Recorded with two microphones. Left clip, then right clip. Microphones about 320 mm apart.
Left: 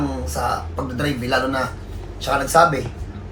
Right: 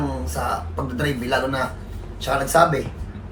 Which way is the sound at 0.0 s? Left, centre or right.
Centre.